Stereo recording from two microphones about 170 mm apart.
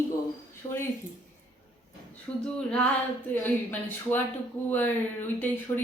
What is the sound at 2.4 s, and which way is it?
Speech, 5° left (ahead or behind).